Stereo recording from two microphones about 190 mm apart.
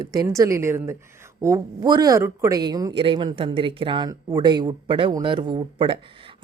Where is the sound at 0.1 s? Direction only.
20° right (ahead or behind).